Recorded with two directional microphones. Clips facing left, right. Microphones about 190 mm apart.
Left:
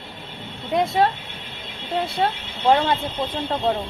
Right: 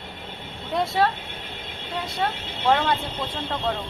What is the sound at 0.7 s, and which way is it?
Speech, 20° left (ahead or behind).